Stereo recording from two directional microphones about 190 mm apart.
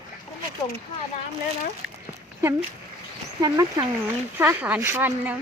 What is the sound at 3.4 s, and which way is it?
Speech, 20° right (ahead or behind).